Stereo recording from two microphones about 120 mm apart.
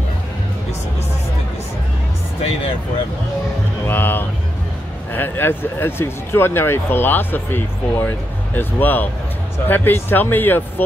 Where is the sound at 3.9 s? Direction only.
15° left (ahead or behind).